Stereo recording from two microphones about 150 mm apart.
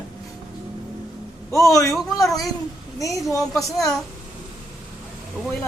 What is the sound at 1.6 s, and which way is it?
Speech, 20° left (ahead or behind).